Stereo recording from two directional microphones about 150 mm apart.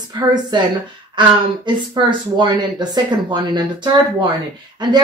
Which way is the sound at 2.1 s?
30° right (ahead or behind).